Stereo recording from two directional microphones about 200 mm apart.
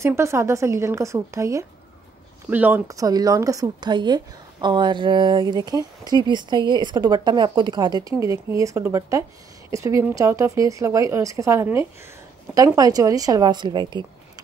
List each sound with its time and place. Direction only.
0.0 s speech: 15° right (ahead or behind)